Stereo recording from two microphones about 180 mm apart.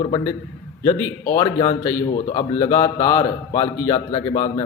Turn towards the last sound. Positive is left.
turn(degrees=20)  # may be behind; listen again after turning